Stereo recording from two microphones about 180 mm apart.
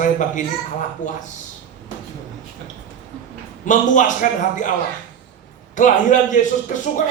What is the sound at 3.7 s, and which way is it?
Speech, 45° left (ahead or behind).